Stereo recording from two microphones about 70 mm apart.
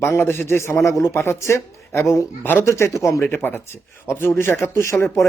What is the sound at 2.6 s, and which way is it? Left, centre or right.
Speech, left.